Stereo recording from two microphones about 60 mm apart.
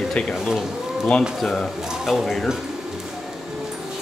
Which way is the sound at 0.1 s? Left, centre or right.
Centre.